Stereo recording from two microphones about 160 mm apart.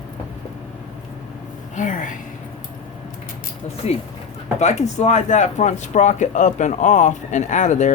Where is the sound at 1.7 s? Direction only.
55° left (ahead or behind).